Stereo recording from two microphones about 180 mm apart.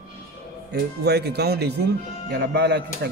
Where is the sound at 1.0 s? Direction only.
65° right (ahead or behind).